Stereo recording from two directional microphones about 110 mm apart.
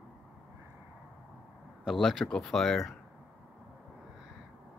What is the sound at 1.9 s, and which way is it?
Speech, centre (ahead or behind).